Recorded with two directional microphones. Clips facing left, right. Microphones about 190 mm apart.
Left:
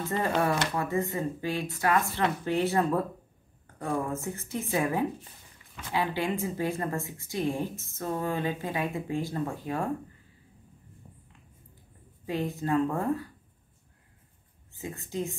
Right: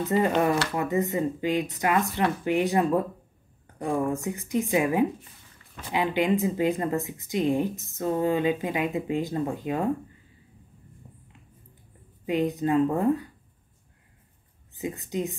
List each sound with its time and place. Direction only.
0.0 s speech: 15° right (ahead or behind)
12.3 s speech: 20° right (ahead or behind)
14.8 s speech: 15° right (ahead or behind)